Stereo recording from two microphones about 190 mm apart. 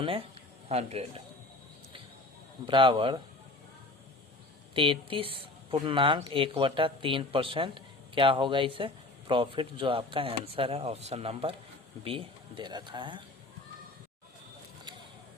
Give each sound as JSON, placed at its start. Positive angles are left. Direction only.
{"t": 0.0, "sound": "speech", "side_deg": -30}
{"t": 2.6, "sound": "speech", "side_deg": -25}
{"t": 4.7, "sound": "speech", "side_deg": -25}